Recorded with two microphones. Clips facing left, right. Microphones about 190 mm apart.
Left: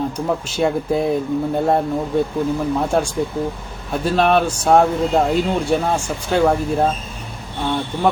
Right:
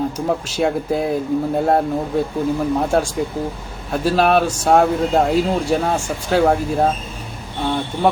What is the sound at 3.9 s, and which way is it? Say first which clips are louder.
Speech: right 1 dB; 5° right (ahead or behind).